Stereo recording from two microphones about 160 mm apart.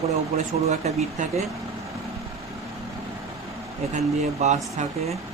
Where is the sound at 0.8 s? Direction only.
45° right (ahead or behind).